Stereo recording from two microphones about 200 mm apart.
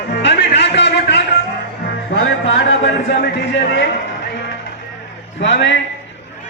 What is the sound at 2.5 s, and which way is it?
Speech, 60° left (ahead or behind).